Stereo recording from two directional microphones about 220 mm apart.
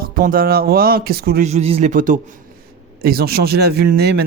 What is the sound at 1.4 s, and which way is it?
A man's voice, 30° right (ahead or behind).